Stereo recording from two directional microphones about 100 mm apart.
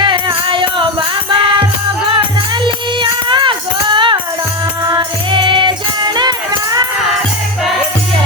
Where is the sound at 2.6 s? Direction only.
50° right (ahead or behind).